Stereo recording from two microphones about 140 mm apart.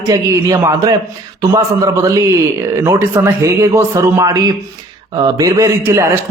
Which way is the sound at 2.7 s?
20° right (ahead or behind).